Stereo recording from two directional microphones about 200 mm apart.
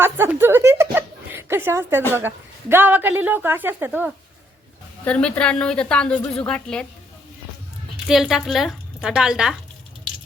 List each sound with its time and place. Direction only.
0.0 s a sound: 10° right (ahead or behind)
2.1 s a woman's voice: 10° right (ahead or behind)
5.0 s a woman's voice: 5° left (ahead or behind)
8.0 s a woman's voice: centre (ahead or behind)